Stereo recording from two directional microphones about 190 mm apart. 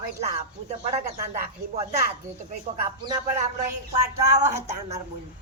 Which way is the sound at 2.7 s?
25° right (ahead or behind).